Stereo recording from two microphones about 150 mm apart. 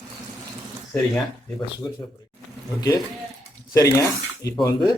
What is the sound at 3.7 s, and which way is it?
Speech, 20° left (ahead or behind).